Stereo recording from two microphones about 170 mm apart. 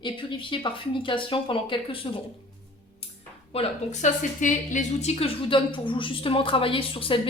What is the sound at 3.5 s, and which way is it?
A woman's voice, 40° left (ahead or behind).